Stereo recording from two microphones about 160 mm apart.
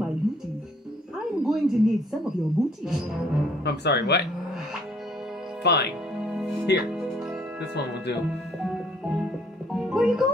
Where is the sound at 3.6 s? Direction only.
90° left.